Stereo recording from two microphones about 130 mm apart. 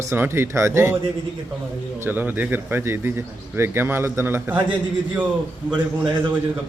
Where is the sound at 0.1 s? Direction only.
20° right (ahead or behind).